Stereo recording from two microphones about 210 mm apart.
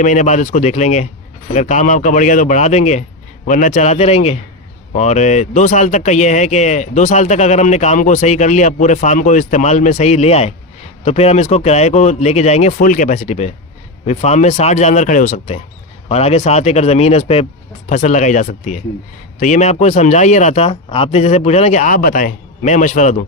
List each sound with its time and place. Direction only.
0.0 s speech: 35° left (ahead or behind)